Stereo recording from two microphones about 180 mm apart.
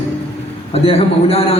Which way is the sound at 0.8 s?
35° left (ahead or behind).